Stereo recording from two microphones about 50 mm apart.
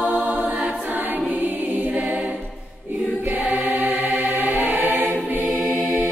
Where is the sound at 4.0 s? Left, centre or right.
Right.